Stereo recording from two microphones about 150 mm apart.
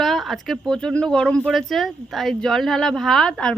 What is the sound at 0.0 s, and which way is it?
Speech, centre (ahead or behind).